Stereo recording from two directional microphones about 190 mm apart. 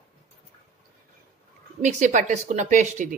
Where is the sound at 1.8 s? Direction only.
40° right (ahead or behind).